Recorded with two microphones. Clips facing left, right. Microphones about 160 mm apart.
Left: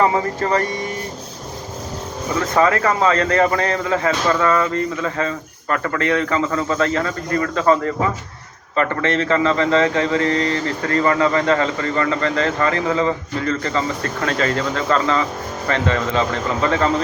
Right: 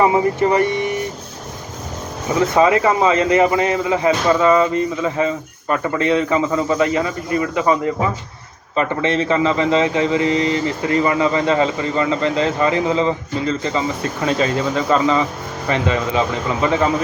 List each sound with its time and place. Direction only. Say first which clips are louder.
0.0 s speech: right 3 dB; 15° right (ahead or behind)
2.6 s speech: right 1 dB; 15° right (ahead or behind)